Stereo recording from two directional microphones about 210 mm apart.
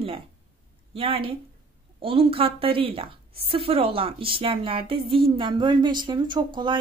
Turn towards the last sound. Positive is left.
turn(degrees=-20)  # may be behind; listen again after turning